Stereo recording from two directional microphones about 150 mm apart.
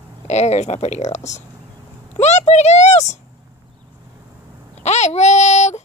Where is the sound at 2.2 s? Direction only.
50° left (ahead or behind).